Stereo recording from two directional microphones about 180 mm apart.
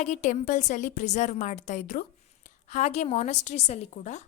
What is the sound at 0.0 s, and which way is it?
A woman's voice, 40° left (ahead or behind).